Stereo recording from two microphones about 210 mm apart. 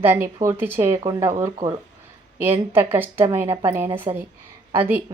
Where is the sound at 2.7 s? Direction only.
10° right (ahead or behind).